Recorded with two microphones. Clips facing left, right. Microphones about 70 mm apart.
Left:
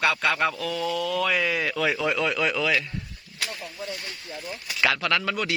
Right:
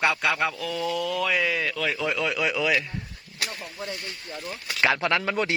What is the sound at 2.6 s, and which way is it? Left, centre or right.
Speech, centre.